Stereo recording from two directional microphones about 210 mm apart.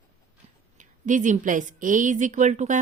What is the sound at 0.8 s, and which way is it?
Speech, 35° right (ahead or behind).